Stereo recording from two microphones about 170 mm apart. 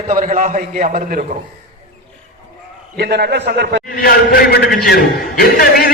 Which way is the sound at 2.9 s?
70° right (ahead or behind).